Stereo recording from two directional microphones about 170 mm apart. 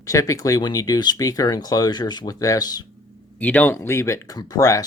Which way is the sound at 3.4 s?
10° left (ahead or behind).